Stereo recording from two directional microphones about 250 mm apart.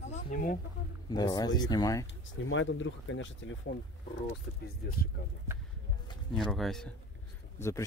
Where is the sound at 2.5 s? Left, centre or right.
Left.